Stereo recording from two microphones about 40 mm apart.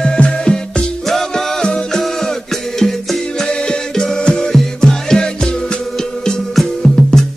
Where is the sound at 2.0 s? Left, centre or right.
Centre.